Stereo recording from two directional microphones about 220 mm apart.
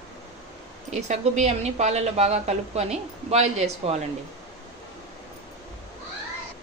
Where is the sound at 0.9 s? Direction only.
30° right (ahead or behind).